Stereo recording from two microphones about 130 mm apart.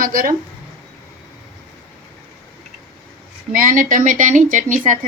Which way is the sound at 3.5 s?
90° right.